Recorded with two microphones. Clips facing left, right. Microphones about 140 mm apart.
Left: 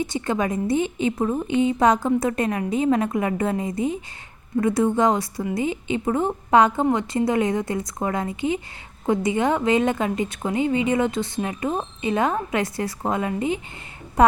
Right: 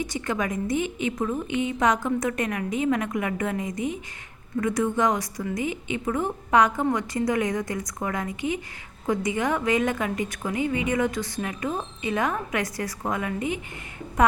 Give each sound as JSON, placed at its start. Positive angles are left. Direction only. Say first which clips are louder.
{"t": 0.0, "sound": "a woman's voice", "louder": "left 4 dB", "side_deg": 25}